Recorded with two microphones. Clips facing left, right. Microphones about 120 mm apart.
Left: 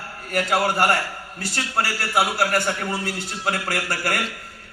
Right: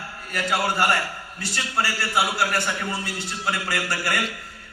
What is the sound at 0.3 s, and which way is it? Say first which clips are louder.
A man's voice: left 3 dB; 45° left (ahead or behind).